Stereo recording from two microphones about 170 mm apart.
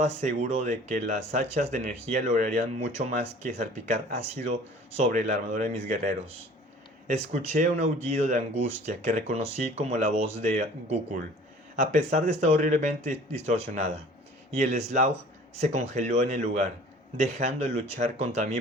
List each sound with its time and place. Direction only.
0.0 s speech: 40° right (ahead or behind)